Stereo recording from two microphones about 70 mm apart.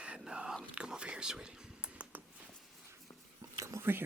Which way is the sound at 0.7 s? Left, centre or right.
Centre.